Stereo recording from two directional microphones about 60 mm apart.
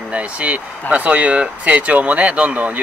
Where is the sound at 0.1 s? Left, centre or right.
Right.